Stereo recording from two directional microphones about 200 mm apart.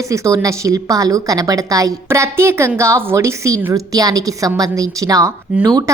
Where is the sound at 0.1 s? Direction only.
15° right (ahead or behind).